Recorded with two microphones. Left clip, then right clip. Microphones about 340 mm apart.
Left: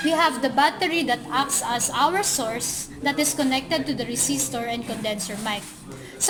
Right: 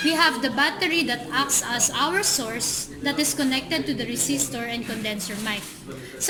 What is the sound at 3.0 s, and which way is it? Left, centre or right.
A woman's voice, centre.